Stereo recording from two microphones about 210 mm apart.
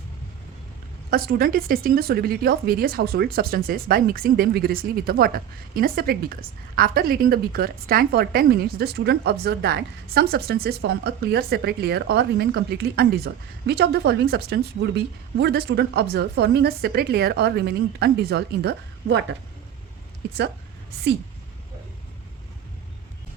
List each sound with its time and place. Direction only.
1.1 s speech: 45° right (ahead or behind)